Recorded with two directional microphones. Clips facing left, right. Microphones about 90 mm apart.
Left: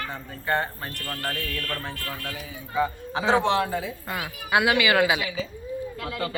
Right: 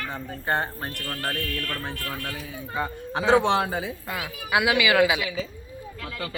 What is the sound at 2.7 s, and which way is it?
Speech, centre (ahead or behind).